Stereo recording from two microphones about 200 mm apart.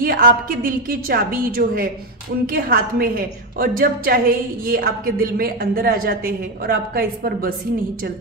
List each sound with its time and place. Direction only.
0.0 s a woman's voice: 45° right (ahead or behind)